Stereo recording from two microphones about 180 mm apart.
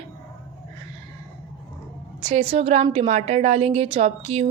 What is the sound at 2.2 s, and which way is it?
A woman's voice, 35° right (ahead or behind).